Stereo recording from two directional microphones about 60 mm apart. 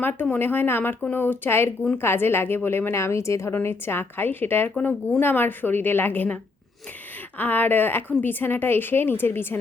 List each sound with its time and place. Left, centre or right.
0.0 s a woman's voice: left
3.5 s a woman's voice: left